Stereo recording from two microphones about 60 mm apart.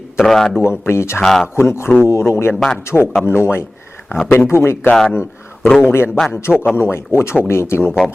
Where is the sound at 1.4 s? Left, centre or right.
Left.